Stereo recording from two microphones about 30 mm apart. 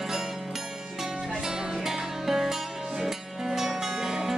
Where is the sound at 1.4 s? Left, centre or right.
Centre.